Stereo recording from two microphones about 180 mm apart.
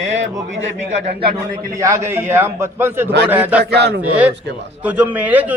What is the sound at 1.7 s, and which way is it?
A man's voice, 15° right (ahead or behind).